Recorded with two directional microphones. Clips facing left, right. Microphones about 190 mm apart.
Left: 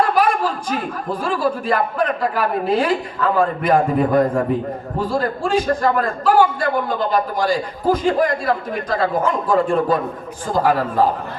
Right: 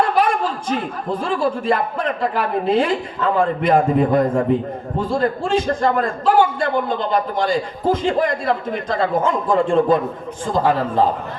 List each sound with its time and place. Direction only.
0.1 s a man's voice: 25° right (ahead or behind)